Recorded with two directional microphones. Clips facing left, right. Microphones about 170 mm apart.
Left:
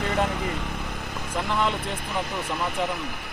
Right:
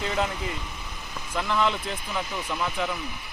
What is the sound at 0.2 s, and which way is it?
Vehicle, 55° left (ahead or behind).